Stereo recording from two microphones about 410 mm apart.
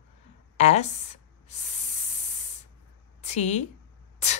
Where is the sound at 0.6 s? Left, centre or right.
Centre.